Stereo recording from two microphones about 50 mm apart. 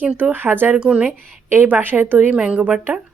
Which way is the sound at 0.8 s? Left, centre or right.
Right.